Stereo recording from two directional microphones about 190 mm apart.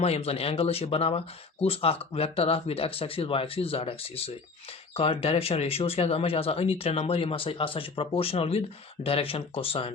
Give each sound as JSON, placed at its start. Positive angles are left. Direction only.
{"t": 0.0, "sound": "speech", "side_deg": 35}